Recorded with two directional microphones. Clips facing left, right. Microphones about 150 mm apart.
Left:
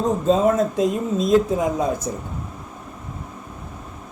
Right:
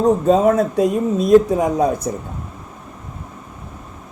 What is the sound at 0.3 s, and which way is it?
Speech, 65° right (ahead or behind).